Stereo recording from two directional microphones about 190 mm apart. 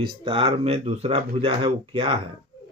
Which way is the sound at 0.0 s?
25° right (ahead or behind).